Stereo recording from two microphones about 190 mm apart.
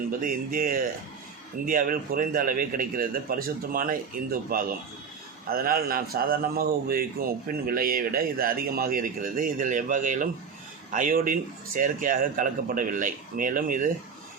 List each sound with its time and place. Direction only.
0.1 s a man's voice: 45° right (ahead or behind)